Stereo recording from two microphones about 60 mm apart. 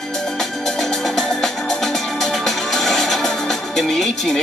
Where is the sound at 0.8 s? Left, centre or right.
Centre.